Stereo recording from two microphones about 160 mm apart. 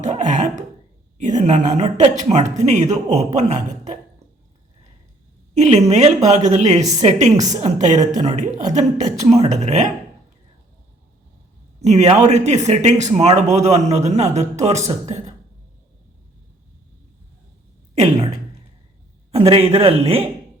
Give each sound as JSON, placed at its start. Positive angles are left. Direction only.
{"t": 0.0, "sound": "a woman's voice", "side_deg": -50}
{"t": 5.5, "sound": "a woman's voice", "side_deg": -45}
{"t": 11.8, "sound": "a woman's voice", "side_deg": -45}
{"t": 17.9, "sound": "speech", "side_deg": -35}
{"t": 19.3, "sound": "a man's voice", "side_deg": -40}